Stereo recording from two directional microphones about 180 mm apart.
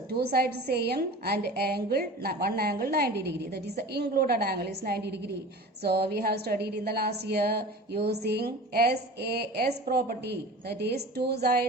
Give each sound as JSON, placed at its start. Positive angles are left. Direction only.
{"t": 0.1, "sound": "a woman's voice", "side_deg": -60}